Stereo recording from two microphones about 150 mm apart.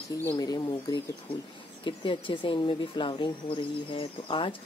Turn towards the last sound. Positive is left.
turn(degrees=35)  # may be behind; listen again after turning